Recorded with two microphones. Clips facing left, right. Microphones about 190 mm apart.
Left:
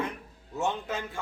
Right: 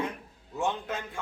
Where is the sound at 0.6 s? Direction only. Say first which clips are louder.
Even; centre (ahead or behind).